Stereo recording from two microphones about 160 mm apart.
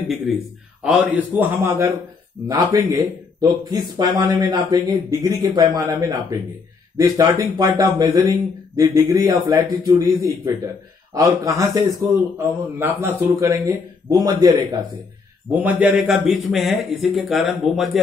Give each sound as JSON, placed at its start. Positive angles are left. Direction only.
{"t": 0.8, "sound": "a man's voice", "side_deg": -10}
{"t": 15.5, "sound": "speech", "side_deg": -10}